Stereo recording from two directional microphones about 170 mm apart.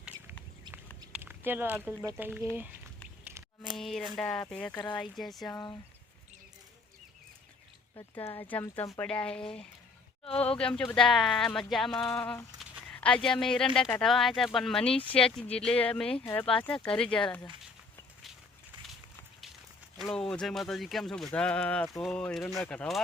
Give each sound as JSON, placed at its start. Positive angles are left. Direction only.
{"t": 1.1, "sound": "a sound", "side_deg": -10}
{"t": 2.1, "sound": "speech", "side_deg": -10}
{"t": 3.8, "sound": "speech", "side_deg": 0}
{"t": 7.9, "sound": "speech", "side_deg": 20}
{"t": 10.2, "sound": "speech", "side_deg": 35}
{"t": 10.6, "sound": "speech", "side_deg": 5}
{"t": 20.0, "sound": "speech", "side_deg": 0}